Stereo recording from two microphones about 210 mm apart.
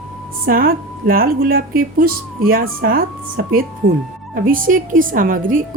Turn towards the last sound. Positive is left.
turn(degrees=-40)  # may be behind; listen again after turning